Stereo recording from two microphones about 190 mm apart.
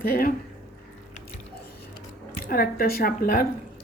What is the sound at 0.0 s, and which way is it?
Speech, 50° left (ahead or behind).